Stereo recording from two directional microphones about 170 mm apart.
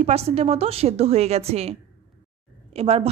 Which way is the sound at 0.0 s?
35° right (ahead or behind).